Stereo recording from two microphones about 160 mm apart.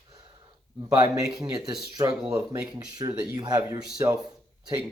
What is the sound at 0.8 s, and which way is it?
Speech, 20° right (ahead or behind).